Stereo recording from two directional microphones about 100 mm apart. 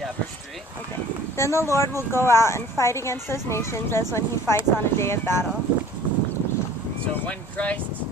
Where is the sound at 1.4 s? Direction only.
25° left (ahead or behind).